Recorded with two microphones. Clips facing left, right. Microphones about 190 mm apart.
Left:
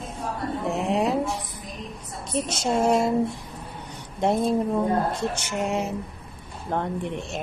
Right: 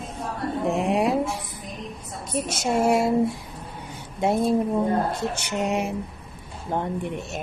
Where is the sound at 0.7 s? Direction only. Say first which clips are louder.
Right 2 dB; 15° right (ahead or behind).